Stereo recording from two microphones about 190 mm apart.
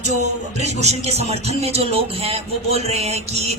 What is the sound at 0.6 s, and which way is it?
Speech, 35° right (ahead or behind).